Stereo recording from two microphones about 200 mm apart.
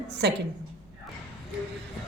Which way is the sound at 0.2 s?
55° right (ahead or behind).